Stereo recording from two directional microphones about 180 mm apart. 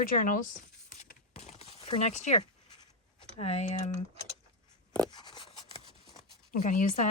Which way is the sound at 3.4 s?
35° left (ahead or behind).